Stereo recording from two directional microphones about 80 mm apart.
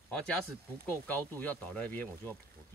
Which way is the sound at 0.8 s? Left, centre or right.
Left.